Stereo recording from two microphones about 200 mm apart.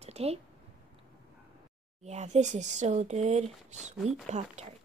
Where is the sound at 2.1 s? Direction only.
35° right (ahead or behind).